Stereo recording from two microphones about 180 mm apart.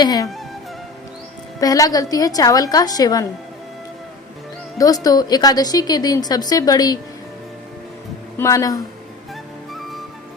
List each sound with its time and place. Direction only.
0.0 s a woman's voice: 20° left (ahead or behind)
1.6 s a woman's voice: 20° left (ahead or behind)
5.0 s a woman's voice: 20° left (ahead or behind)
8.4 s a woman's voice: 15° left (ahead or behind)